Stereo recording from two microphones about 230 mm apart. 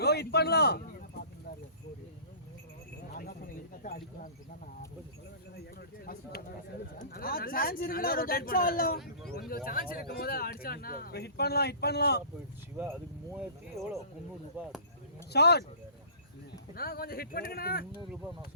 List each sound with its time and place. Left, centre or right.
0.0 s a sound: left
3.2 s speech: left
7.0 s speech: left
12.7 s speech: centre
15.3 s speech: left
16.7 s speech: left